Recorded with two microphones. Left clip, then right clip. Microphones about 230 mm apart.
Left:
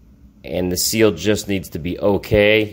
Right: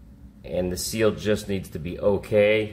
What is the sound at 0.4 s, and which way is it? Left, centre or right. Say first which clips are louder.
Speech: left 6 dB; left.